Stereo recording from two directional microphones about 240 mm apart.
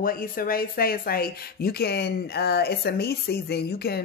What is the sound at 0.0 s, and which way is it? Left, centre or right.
Speech, left.